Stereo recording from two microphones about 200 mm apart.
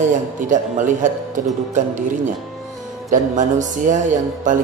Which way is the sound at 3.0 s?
40° right (ahead or behind).